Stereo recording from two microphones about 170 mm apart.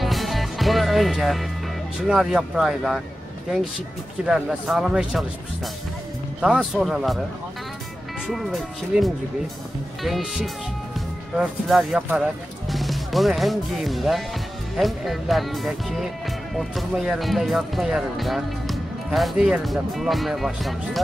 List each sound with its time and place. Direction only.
0.0 s music: centre (ahead or behind)
2.0 s speech: 5° right (ahead or behind)
4.3 s speech: 5° right (ahead or behind)
6.4 s speech: centre (ahead or behind)
8.3 s speech: centre (ahead or behind)